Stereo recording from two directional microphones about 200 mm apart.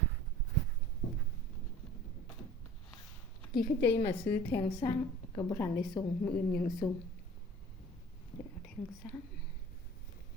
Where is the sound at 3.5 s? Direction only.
55° left (ahead or behind).